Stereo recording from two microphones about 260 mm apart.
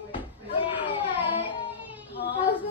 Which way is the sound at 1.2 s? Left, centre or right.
Centre.